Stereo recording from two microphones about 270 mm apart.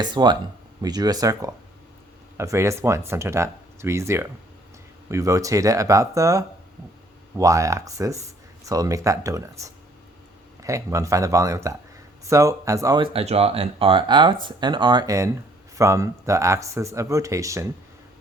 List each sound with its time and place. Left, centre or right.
0.0 s speech: centre